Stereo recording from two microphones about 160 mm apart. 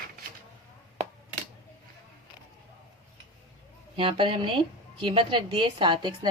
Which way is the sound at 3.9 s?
30° right (ahead or behind).